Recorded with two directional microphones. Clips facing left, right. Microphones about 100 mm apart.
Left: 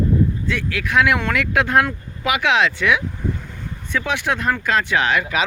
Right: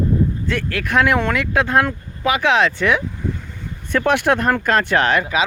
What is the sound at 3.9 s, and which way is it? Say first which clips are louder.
Speech: right 6 dB; 55° right (ahead or behind).